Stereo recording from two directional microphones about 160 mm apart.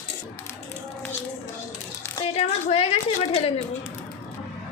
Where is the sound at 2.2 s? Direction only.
40° left (ahead or behind).